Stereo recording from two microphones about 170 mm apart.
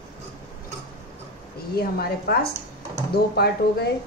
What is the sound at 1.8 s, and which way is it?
Speech, 65° left (ahead or behind).